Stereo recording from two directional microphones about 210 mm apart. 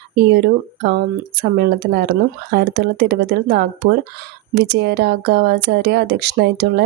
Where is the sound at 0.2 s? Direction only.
55° right (ahead or behind).